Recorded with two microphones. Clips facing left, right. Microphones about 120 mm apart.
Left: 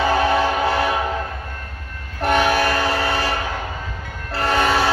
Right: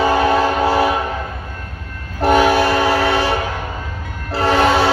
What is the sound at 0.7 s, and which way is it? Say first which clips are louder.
Train: right 4 dB; 30° right (ahead or behind).